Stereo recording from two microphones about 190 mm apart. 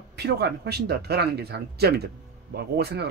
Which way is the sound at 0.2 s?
60° right (ahead or behind).